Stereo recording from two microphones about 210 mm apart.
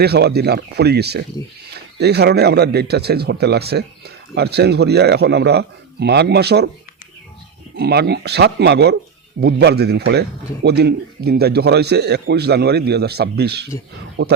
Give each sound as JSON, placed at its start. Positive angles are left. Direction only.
{"t": 0.0, "sound": "speech", "side_deg": -50}
{"t": 7.8, "sound": "speech", "side_deg": -50}